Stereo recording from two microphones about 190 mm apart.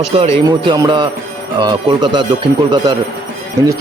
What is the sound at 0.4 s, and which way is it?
A man's voice, 20° right (ahead or behind).